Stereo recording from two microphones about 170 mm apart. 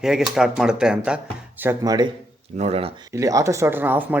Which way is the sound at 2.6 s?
40° right (ahead or behind).